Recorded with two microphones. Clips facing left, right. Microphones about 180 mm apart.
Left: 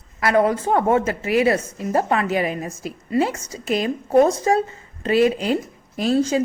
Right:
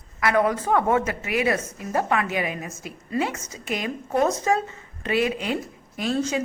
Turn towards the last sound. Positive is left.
turn(degrees=35)  # may be behind; listen again after turning